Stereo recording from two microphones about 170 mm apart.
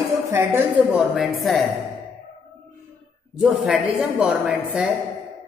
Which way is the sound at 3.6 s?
10° right (ahead or behind).